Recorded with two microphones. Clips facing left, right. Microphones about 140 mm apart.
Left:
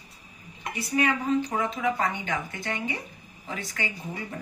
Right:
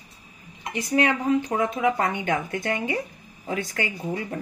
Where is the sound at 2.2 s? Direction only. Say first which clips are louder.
Right 6 dB; 55° right (ahead or behind).